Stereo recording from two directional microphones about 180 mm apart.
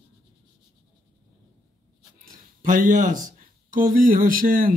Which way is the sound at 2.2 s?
45° right (ahead or behind).